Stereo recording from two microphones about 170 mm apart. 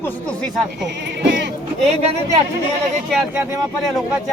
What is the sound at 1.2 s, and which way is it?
Sheep, 90° right.